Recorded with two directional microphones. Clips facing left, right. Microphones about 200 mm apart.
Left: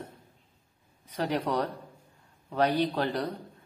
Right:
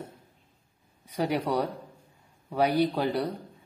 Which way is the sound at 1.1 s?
10° right (ahead or behind).